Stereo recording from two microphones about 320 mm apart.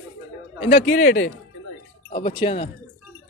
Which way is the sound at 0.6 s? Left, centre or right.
Centre.